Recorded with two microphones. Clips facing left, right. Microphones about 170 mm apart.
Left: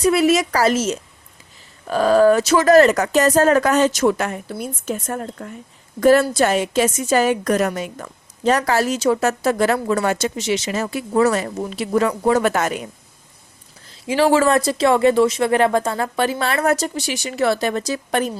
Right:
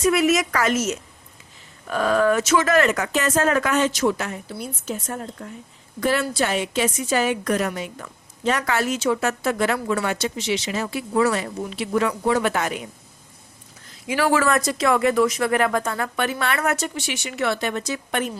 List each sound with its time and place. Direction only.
0.0 s speech: 30° left (ahead or behind); by 5.5 s 55° left (ahead or behind)
6.0 s a woman's voice: 45° left (ahead or behind)
13.8 s speech: 30° left (ahead or behind)